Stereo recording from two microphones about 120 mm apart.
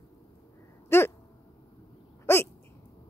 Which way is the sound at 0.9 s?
20° left (ahead or behind).